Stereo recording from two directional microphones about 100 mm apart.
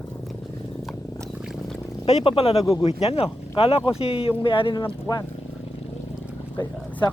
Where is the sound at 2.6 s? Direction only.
40° left (ahead or behind).